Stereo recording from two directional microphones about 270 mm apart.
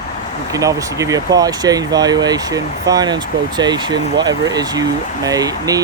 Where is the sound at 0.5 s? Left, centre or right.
Centre.